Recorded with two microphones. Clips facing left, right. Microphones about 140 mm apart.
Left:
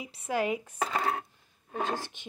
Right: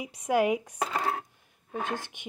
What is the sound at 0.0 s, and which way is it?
Speech, 15° right (ahead or behind).